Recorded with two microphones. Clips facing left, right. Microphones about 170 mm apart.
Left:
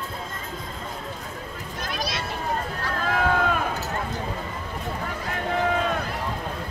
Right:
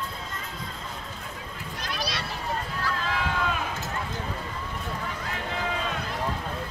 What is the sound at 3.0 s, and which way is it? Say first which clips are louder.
Run: left 9 dB; 50° left (ahead or behind).